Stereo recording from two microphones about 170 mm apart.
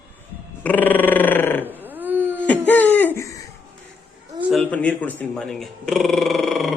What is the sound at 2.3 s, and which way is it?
Laughter, 10° left (ahead or behind).